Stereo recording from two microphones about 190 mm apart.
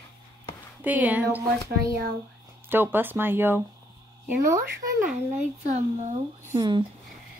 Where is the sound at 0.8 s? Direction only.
10° right (ahead or behind).